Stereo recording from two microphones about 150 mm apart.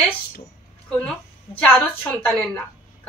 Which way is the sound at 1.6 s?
15° left (ahead or behind).